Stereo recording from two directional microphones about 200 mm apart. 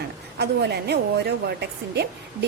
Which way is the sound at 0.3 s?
55° right (ahead or behind).